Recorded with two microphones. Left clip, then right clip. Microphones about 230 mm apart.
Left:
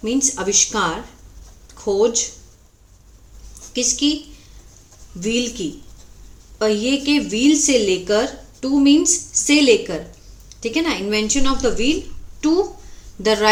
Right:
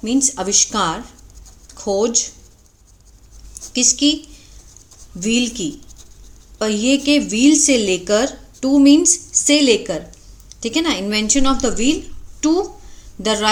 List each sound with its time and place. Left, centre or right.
0.0 s a woman's voice: right
1.6 s a sound: right
3.7 s a woman's voice: right
5.2 s a woman's voice: right